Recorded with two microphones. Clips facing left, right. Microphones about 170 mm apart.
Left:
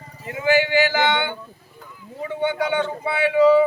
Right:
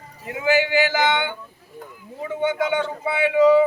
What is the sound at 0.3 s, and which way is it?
Speech, 10° right (ahead or behind).